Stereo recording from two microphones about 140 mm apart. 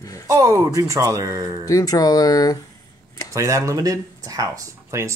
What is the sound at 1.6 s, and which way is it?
Speech, 25° left (ahead or behind).